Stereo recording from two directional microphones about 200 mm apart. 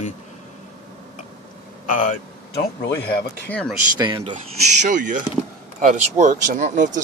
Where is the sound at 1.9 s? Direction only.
40° left (ahead or behind).